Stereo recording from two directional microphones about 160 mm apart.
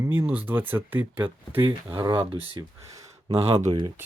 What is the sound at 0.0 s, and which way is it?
Speech, 15° right (ahead or behind).